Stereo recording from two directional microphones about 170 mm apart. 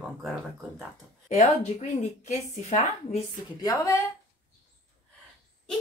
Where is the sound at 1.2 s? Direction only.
45° left (ahead or behind).